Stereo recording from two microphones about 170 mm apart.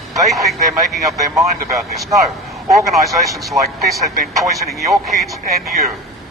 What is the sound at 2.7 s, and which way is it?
Speech, centre (ahead or behind).